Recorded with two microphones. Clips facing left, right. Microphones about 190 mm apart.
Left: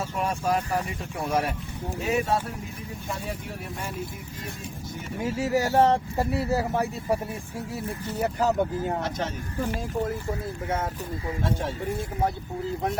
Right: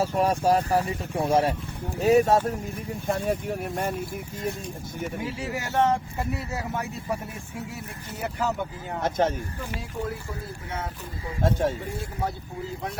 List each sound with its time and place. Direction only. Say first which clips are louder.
0.0 s speech: right 5 dB; 35° right (ahead or behind)
2.0 s speech: right 7 dB; 40° right (ahead or behind)
5.2 s speech: left 6 dB; 40° left (ahead or behind)
8.2 s speech: left 4 dB; 35° left (ahead or behind)
9.0 s speech: right 6 dB; 50° right (ahead or behind)